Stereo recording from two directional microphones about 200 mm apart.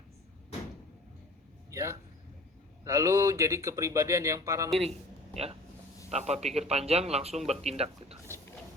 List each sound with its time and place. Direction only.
1.7 s speech: 15° right (ahead or behind)
6.1 s a man's voice: 35° right (ahead or behind)